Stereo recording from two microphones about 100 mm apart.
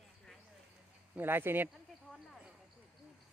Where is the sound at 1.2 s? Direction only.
20° right (ahead or behind).